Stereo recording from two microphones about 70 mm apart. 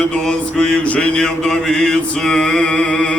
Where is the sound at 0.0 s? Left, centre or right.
Centre.